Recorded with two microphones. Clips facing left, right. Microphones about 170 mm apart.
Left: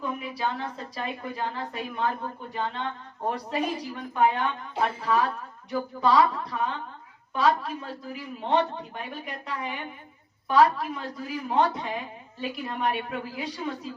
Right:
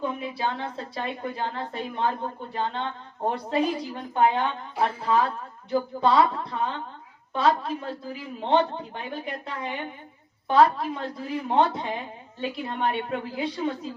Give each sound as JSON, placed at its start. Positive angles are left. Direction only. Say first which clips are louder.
{"t": 0.0, "sound": "a woman's voice", "louder": "right 2 dB", "side_deg": -30}